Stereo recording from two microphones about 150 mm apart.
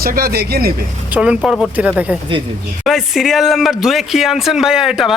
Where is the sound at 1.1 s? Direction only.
10° right (ahead or behind).